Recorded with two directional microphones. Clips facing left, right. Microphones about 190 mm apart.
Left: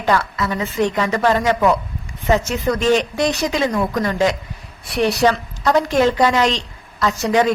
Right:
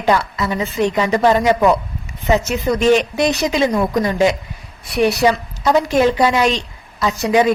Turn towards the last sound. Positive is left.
turn(degrees=-15)  # may be behind; listen again after turning